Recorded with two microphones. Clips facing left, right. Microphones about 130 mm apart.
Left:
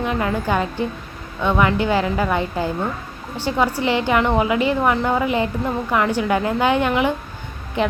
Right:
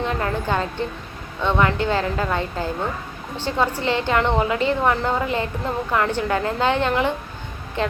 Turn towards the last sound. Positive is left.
turn(degrees=15)  # may be behind; listen again after turning